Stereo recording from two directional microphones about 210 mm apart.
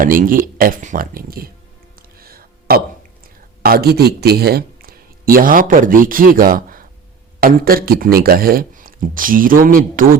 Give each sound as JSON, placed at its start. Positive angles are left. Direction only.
{"t": 0.0, "sound": "speech", "side_deg": -40}
{"t": 2.0, "sound": "music", "side_deg": -45}
{"t": 3.6, "sound": "speech", "side_deg": -45}